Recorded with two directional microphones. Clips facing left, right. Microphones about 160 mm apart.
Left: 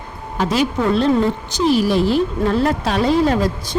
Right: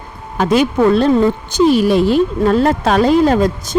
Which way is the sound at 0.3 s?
55° right (ahead or behind).